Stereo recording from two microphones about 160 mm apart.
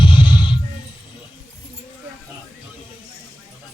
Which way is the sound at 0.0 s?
30° left (ahead or behind).